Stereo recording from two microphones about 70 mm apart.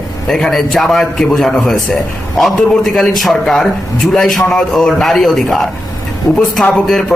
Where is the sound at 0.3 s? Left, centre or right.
Centre.